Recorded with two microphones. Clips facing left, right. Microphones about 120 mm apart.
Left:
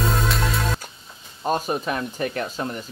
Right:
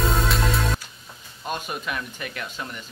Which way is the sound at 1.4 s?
35° left (ahead or behind).